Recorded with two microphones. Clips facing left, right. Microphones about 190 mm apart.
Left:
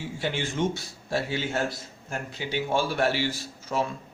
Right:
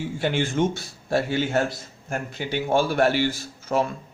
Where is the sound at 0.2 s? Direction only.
55° right (ahead or behind).